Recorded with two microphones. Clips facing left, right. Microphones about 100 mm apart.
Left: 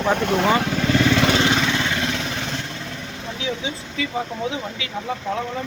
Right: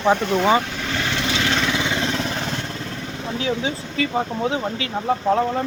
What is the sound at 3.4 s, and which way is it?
Speech, 40° right (ahead or behind).